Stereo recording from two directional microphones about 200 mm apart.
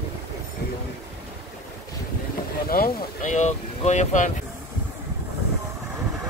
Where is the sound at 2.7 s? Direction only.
40° left (ahead or behind).